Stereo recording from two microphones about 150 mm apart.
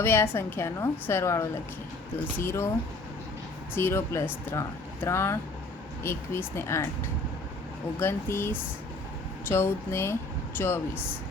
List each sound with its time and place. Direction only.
0.0 s a woman's voice: 15° left (ahead or behind)
3.8 s a woman's voice: 15° left (ahead or behind)
7.9 s a woman's voice: 15° left (ahead or behind)